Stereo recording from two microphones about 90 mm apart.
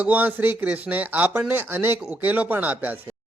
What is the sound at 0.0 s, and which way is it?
Speech, 20° right (ahead or behind).